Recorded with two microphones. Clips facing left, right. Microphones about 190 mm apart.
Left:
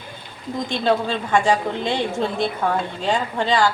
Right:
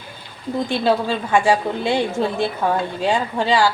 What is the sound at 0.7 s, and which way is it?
A woman's voice, 10° right (ahead or behind).